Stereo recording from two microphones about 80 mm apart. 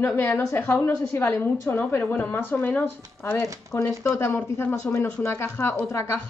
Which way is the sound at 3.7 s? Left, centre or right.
Left.